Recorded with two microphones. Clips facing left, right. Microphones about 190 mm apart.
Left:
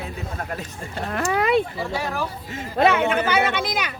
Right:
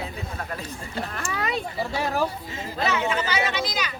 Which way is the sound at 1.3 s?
55° left (ahead or behind).